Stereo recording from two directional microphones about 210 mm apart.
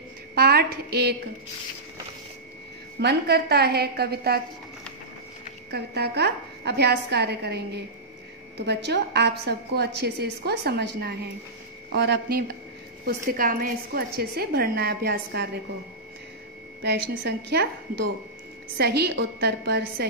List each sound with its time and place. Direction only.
0.3 s a woman's voice: 45° right (ahead or behind)
3.0 s a woman's voice: 50° right (ahead or behind)
5.7 s a woman's voice: 50° right (ahead or behind)
16.8 s a woman's voice: 50° right (ahead or behind)
18.8 s a woman's voice: 50° right (ahead or behind)